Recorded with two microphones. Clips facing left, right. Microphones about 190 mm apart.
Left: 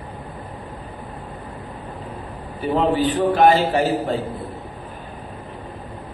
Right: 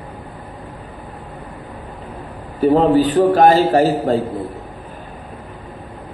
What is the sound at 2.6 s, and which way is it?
A man's voice, 40° right (ahead or behind).